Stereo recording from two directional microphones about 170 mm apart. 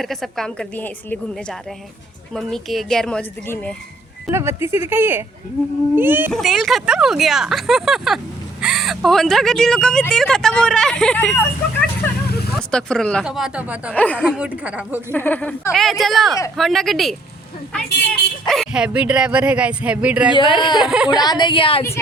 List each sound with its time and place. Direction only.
0.0 s speech: centre (ahead or behind)
4.3 s speech: 15° right (ahead or behind)
6.3 s speech: centre (ahead or behind)
13.9 s speech: 10° left (ahead or behind)
14.3 s speech: 5° right (ahead or behind)
15.1 s speech: 10° left (ahead or behind)
18.4 s speech: 5° left (ahead or behind)
20.3 s a woman's voice: 30° left (ahead or behind)
20.8 s speech: 5° right (ahead or behind)
21.2 s a woman's voice: 25° left (ahead or behind)